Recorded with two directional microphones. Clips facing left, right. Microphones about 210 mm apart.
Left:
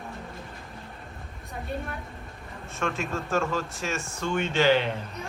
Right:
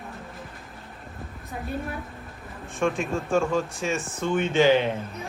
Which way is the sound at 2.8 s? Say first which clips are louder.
Right 5 dB; 15° right (ahead or behind).